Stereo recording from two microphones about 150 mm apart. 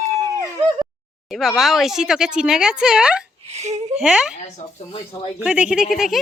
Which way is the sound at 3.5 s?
45° right (ahead or behind).